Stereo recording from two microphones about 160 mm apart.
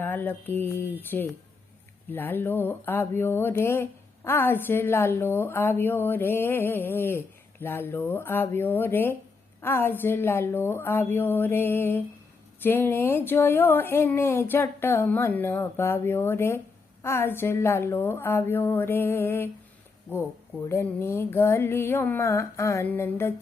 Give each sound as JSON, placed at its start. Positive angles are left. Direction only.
{"t": 0.0, "sound": "speech", "side_deg": 10}
{"t": 20.7, "sound": "speech", "side_deg": 15}